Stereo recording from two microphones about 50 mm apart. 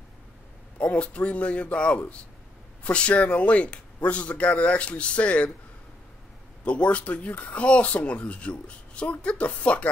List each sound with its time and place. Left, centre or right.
0.7 s speech: left
6.6 s speech: left